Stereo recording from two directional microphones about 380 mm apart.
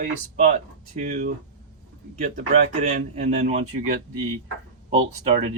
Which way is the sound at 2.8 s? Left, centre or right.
Centre.